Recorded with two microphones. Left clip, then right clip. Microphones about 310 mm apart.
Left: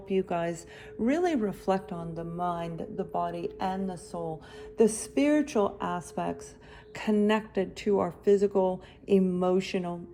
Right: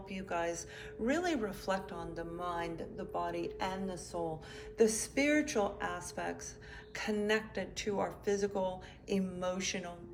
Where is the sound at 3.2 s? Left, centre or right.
Centre.